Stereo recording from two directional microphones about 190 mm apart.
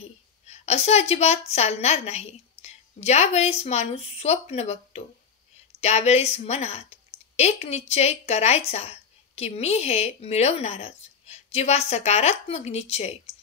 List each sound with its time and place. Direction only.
0.5 s a woman's voice: 35° left (ahead or behind)